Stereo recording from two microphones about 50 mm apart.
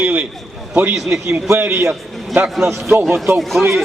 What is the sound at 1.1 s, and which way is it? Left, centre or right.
Speech, right.